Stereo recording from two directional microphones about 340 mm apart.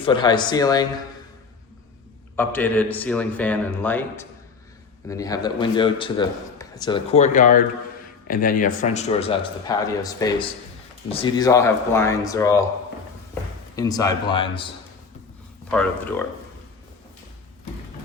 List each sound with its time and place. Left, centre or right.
0.0 s a man's voice: centre
2.3 s a man's voice: centre
13.7 s a man's voice: centre
15.7 s a man's voice: centre